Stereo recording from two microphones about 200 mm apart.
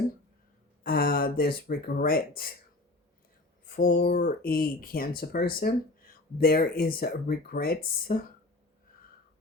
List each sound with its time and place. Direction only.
0.9 s speech: 50° left (ahead or behind)
3.7 s speech: 50° left (ahead or behind)